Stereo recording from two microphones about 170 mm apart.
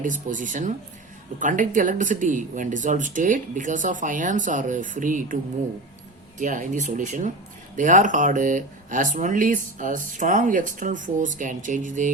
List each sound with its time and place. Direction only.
0.0 s speech: 50° right (ahead or behind)
6.4 s speech: 50° right (ahead or behind)